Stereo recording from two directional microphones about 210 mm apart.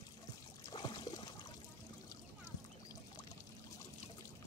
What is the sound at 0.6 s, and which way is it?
Trickle, 20° left (ahead or behind).